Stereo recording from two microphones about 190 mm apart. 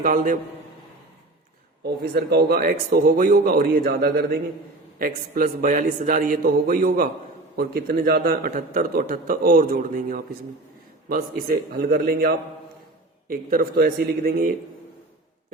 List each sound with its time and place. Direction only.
0.0 s a man's voice: 45° right (ahead or behind)
1.8 s a man's voice: 55° right (ahead or behind)